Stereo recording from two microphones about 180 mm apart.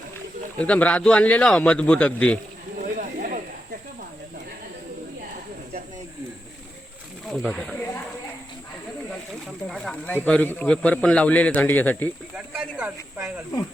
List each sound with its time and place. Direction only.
0.6 s a man's voice: 5° left (ahead or behind)
2.8 s a sound: 45° right (ahead or behind)
7.3 s speech: 5° left (ahead or behind)
9.6 s a man's voice: centre (ahead or behind)
12.3 s snake: 5° right (ahead or behind)